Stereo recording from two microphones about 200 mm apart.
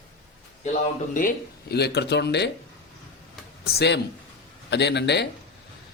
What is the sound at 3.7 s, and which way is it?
Speech, 60° left (ahead or behind).